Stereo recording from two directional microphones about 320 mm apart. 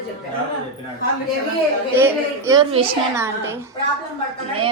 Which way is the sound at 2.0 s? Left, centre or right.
Centre.